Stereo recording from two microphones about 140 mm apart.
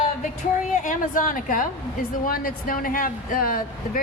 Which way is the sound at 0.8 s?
70° left (ahead or behind).